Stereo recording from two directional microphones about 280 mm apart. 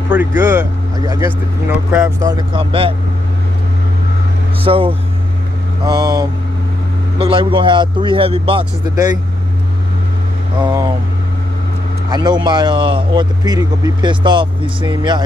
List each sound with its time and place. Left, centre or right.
0.1 s speech: centre
4.6 s speech: centre
12.1 s speech: centre